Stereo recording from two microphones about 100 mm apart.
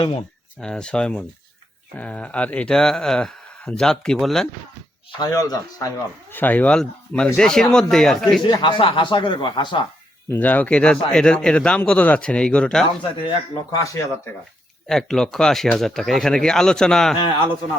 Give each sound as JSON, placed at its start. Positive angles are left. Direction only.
{"t": 0.6, "sound": "a man's voice", "side_deg": 10}
{"t": 5.2, "sound": "speech", "side_deg": 35}
{"t": 6.3, "sound": "a man's voice", "side_deg": 15}
{"t": 8.4, "sound": "speech", "side_deg": 55}
{"t": 10.2, "sound": "a man's voice", "side_deg": 15}
{"t": 13.0, "sound": "speech", "side_deg": 55}
{"t": 13.8, "sound": "speech", "side_deg": 30}
{"t": 14.8, "sound": "speech", "side_deg": 5}